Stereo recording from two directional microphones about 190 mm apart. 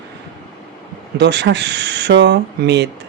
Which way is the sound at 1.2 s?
65° right (ahead or behind).